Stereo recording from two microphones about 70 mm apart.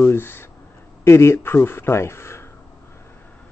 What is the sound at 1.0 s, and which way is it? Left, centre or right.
Speech, left.